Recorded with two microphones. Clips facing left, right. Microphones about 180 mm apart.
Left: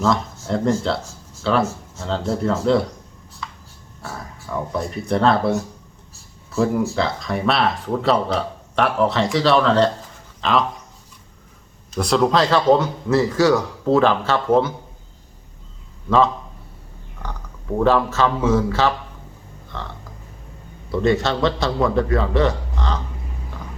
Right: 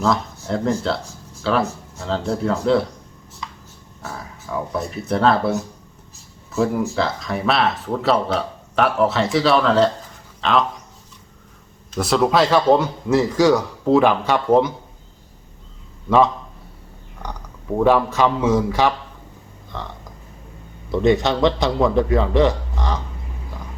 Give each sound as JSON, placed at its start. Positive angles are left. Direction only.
{"t": 0.0, "sound": "speech", "side_deg": 0}
{"t": 4.0, "sound": "speech", "side_deg": 0}
{"t": 11.9, "sound": "a man's voice", "side_deg": -5}
{"t": 16.0, "sound": "a man's voice", "side_deg": -15}
{"t": 20.9, "sound": "a man's voice", "side_deg": -20}